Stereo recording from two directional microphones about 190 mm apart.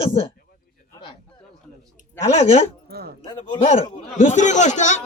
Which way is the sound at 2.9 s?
55° right (ahead or behind).